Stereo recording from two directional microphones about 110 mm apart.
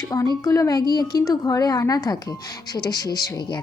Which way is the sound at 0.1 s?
35° left (ahead or behind).